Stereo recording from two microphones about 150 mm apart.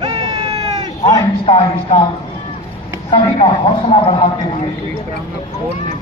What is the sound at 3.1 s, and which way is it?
Speech, 35° left (ahead or behind).